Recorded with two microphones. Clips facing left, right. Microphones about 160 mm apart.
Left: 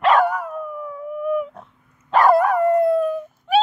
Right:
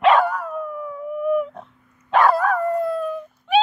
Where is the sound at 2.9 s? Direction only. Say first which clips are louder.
Left 6 dB; 10° left (ahead or behind).